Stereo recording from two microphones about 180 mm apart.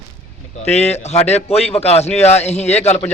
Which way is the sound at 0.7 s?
35° left (ahead or behind).